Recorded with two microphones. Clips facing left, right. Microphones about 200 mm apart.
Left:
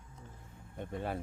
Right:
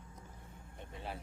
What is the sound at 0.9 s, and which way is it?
Speech, 50° left (ahead or behind).